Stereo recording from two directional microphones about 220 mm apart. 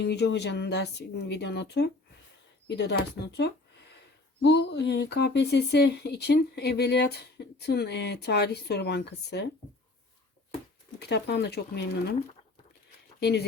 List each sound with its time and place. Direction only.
0.0 s speech: 50° left (ahead or behind)
4.4 s speech: 50° left (ahead or behind)
11.0 s speech: 50° left (ahead or behind)
13.1 s speech: 50° left (ahead or behind)